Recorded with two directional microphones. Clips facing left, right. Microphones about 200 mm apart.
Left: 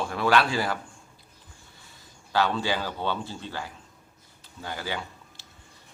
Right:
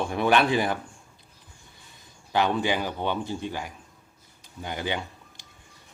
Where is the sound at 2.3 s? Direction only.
20° right (ahead or behind).